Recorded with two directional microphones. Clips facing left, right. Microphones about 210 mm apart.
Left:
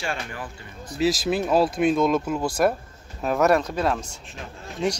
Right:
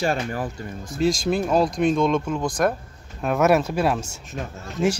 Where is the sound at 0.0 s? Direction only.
40° right (ahead or behind).